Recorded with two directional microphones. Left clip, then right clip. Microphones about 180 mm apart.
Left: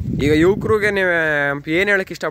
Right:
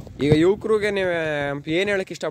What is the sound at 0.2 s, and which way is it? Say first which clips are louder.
Speech: left 3 dB; centre (ahead or behind).